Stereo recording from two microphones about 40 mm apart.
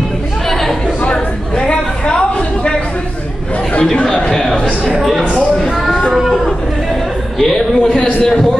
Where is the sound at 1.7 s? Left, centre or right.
Left.